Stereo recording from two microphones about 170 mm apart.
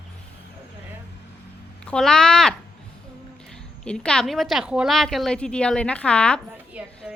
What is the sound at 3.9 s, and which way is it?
A woman's voice, 5° left (ahead or behind).